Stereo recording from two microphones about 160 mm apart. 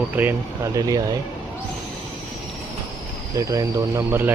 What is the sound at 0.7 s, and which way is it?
Speech, 20° right (ahead or behind).